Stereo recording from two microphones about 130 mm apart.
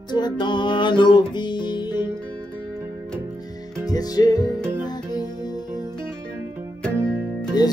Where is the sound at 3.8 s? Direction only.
30° left (ahead or behind).